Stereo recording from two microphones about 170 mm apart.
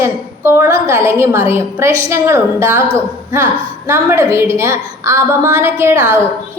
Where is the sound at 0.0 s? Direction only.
15° right (ahead or behind).